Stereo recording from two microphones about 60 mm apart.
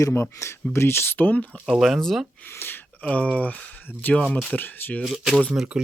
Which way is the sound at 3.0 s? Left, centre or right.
Centre.